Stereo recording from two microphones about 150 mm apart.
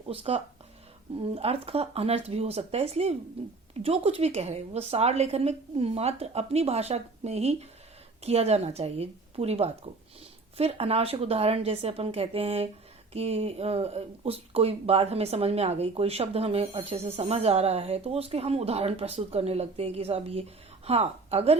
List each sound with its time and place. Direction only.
0.1 s a woman's voice: 40° right (ahead or behind)